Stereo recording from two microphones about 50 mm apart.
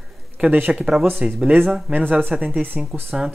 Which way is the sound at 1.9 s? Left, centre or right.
Right.